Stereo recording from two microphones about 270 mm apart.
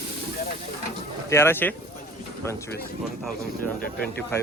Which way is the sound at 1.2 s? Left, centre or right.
Centre.